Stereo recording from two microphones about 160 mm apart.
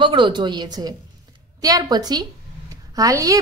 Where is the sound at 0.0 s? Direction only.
30° right (ahead or behind).